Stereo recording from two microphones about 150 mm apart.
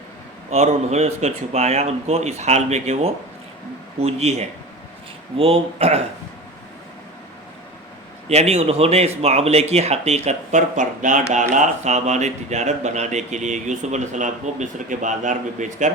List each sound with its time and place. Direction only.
0.5 s speech: 45° right (ahead or behind)
8.3 s speech: 45° right (ahead or behind)